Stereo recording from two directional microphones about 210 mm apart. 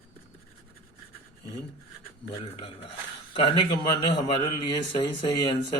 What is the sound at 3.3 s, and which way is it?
Speech, 20° left (ahead or behind).